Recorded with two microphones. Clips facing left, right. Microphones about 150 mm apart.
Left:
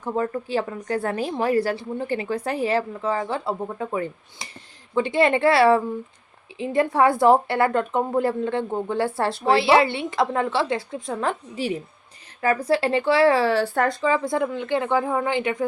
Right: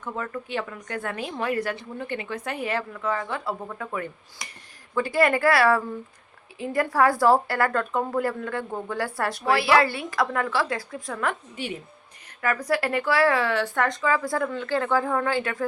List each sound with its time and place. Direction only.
0.0 s a woman's voice: 30° left (ahead or behind)